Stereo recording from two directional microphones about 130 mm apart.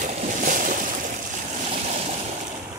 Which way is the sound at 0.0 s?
90° right.